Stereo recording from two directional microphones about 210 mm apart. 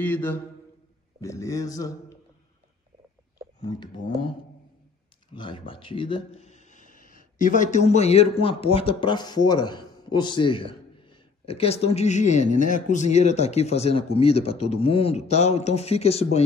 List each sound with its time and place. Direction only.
0.0 s speech: 10° left (ahead or behind)
3.6 s a man's voice: 20° left (ahead or behind)
5.3 s a man's voice: 25° left (ahead or behind)